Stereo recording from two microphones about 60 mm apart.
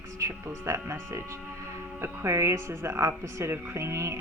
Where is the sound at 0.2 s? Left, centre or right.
Right.